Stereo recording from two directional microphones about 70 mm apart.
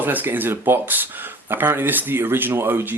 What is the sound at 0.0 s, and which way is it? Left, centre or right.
Speech, right.